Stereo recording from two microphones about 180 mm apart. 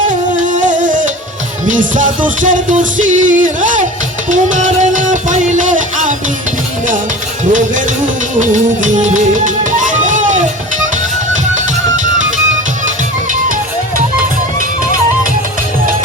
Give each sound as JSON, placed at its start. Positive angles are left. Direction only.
{"t": 0.1, "sound": "music", "side_deg": -45}
{"t": 7.4, "sound": "music", "side_deg": -45}